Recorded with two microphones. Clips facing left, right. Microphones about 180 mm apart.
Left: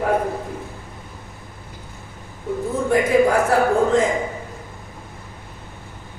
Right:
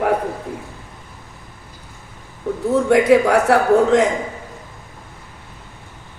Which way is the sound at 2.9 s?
70° right (ahead or behind).